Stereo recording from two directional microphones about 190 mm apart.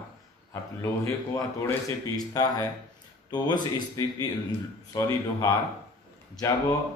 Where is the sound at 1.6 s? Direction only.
15° left (ahead or behind).